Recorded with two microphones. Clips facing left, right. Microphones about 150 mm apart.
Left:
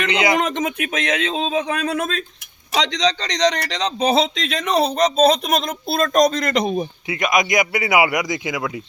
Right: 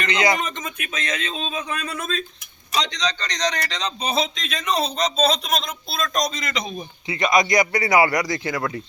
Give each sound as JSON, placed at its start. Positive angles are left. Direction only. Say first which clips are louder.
{"t": 0.1, "sound": "speech", "louder": "left 1 dB", "side_deg": 20}
{"t": 0.3, "sound": "a man's voice", "louder": "left 8 dB", "side_deg": 85}
{"t": 7.1, "sound": "a man's voice", "louder": "right 1 dB", "side_deg": 5}